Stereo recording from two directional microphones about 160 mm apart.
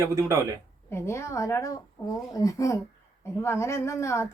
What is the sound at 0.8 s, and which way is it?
A woman's voice, 15° left (ahead or behind).